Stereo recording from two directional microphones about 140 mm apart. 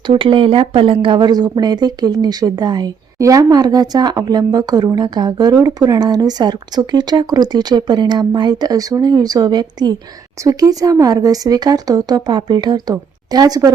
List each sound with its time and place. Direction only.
0.1 s speech: 35° right (ahead or behind)